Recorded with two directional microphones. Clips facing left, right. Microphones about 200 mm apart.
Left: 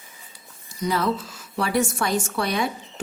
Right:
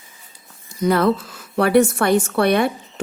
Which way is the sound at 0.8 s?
55° right (ahead or behind).